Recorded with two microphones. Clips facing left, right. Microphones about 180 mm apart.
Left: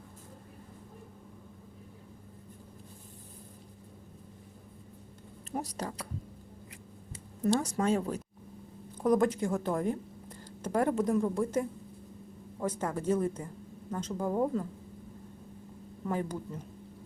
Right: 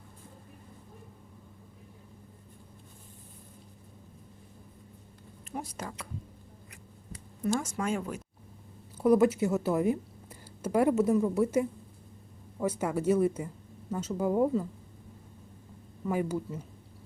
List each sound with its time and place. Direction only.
5.5 s speech: 40° left (ahead or behind)
7.1 s speech: 35° left (ahead or behind)
9.0 s a woman's voice: 5° right (ahead or behind)
16.0 s a woman's voice: 5° right (ahead or behind)